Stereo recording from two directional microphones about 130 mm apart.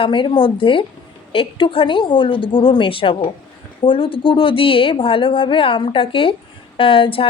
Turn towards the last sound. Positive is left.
turn(degrees=45)  # may be behind; listen again after turning